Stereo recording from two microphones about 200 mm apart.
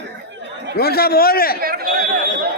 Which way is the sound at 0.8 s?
50° left (ahead or behind).